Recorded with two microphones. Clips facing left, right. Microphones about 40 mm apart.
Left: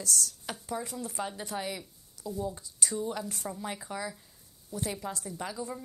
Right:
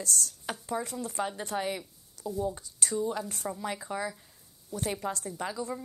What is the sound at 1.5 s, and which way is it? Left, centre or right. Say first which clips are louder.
Speech: right 4 dB; right.